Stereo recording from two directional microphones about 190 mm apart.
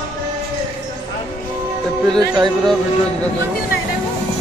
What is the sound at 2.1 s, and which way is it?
Speech, 20° right (ahead or behind).